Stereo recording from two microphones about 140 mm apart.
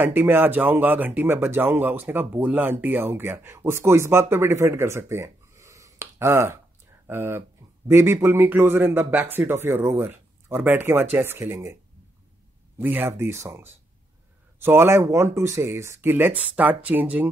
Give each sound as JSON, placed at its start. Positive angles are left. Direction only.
{"t": 0.0, "sound": "a man's voice", "side_deg": -15}